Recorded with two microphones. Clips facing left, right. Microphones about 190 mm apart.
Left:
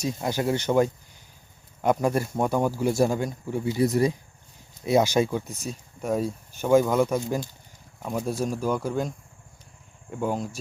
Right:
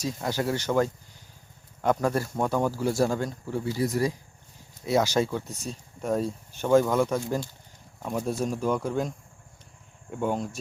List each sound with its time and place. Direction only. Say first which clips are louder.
0.0 s speech: left 2 dB; 15° left (ahead or behind)
8.0 s speech: left 1 dB; centre (ahead or behind)